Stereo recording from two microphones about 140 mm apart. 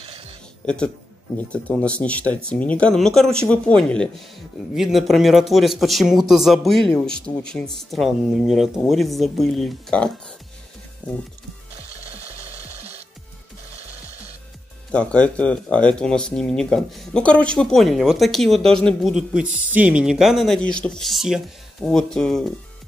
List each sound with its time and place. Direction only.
1.5 s speech: 10° left (ahead or behind)
12.1 s music: 50° right (ahead or behind)
14.9 s speech: 10° left (ahead or behind)